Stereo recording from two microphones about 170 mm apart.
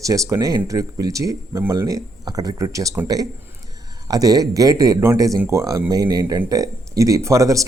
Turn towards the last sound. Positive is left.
turn(degrees=-20)  # may be behind; listen again after turning